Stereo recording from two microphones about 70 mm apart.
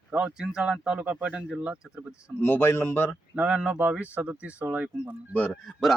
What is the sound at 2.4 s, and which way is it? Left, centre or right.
Speech, left.